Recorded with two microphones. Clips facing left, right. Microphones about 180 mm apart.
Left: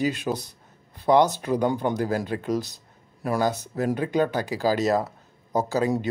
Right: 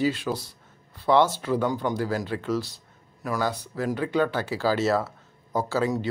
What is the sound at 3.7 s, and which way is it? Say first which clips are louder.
Speech: even; 20° left (ahead or behind).